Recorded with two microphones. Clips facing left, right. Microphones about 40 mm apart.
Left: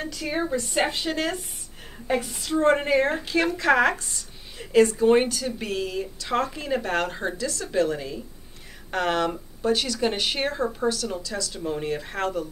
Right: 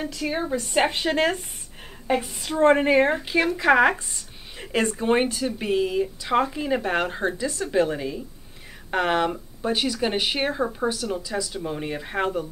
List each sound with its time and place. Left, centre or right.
0.0 s speech: centre
0.8 s speech: right
2.6 s speech: right
4.6 s speech: right